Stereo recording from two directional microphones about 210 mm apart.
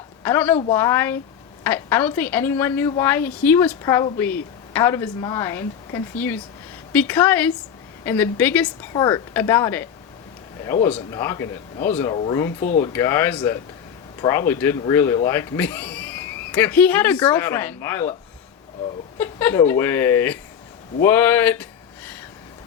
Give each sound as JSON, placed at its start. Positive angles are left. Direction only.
{"t": 0.3, "sound": "a woman's voice", "side_deg": 10}
{"t": 8.9, "sound": "a woman's voice", "side_deg": 20}
{"t": 12.1, "sound": "speech", "side_deg": 25}
{"t": 12.4, "sound": "a woman's voice", "side_deg": 15}
{"t": 19.2, "sound": "a woman's voice", "side_deg": 10}
{"t": 21.0, "sound": "a sound", "side_deg": 10}